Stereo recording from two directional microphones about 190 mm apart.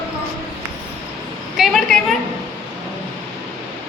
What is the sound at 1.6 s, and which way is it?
Speech, centre (ahead or behind).